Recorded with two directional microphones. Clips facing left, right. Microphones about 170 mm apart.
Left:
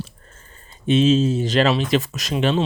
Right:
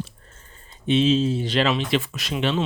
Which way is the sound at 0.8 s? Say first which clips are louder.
Left 3 dB; 45° left (ahead or behind).